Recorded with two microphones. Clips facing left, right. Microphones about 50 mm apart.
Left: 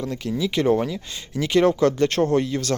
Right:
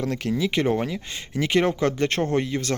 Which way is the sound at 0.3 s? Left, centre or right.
Right.